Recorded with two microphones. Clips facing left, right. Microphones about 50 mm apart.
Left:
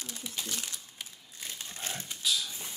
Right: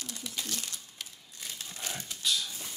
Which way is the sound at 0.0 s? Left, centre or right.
Left.